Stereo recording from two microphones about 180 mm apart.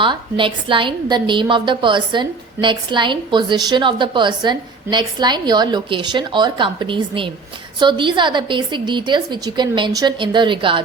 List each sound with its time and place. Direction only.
0.0 s a woman's voice: 30° right (ahead or behind)